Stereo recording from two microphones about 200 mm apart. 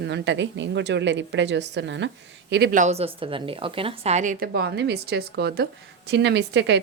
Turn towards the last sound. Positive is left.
turn(degrees=-60)  # may be behind; listen again after turning